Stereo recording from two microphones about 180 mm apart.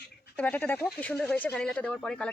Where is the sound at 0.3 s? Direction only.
10° left (ahead or behind).